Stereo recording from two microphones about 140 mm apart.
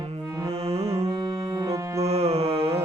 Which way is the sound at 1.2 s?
25° right (ahead or behind).